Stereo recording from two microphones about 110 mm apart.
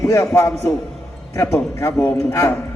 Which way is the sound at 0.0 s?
25° left (ahead or behind).